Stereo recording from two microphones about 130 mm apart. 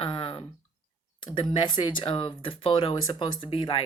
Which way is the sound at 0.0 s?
40° left (ahead or behind).